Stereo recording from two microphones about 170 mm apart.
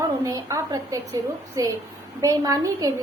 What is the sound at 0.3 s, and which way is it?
A woman's voice, 20° right (ahead or behind).